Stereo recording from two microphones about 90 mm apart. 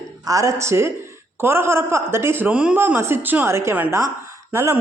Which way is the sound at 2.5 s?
10° right (ahead or behind).